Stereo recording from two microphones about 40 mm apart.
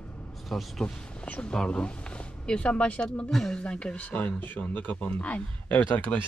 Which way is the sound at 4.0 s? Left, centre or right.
Left.